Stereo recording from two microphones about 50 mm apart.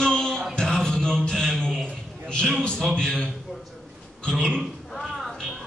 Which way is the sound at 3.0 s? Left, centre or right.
Centre.